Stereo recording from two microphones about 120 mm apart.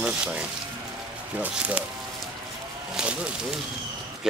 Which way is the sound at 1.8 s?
10° right (ahead or behind).